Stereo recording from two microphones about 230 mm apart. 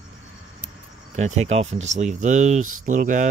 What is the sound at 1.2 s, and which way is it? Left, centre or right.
Speech, right.